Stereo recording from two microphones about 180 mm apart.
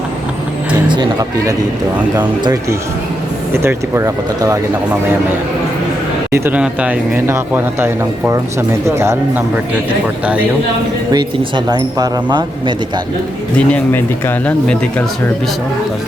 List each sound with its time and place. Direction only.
0.9 s a man's voice: 25° right (ahead or behind)
6.3 s a man's voice: 10° right (ahead or behind)
11.1 s speech: 25° right (ahead or behind)
13.6 s speech: 10° left (ahead or behind)